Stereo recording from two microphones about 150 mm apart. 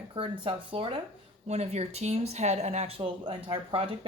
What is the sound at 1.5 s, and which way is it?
Speech, 45° right (ahead or behind).